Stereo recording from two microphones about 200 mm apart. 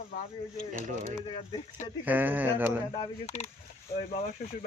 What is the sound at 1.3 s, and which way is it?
Speech, 25° left (ahead or behind).